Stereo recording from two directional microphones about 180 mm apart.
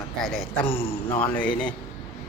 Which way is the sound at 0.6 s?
30° left (ahead or behind).